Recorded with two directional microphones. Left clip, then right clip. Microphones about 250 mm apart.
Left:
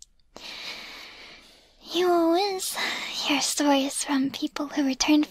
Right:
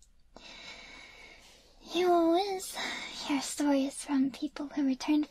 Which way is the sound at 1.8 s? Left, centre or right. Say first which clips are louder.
Left 4 dB; centre.